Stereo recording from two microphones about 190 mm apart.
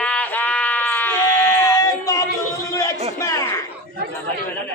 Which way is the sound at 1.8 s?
20° left (ahead or behind).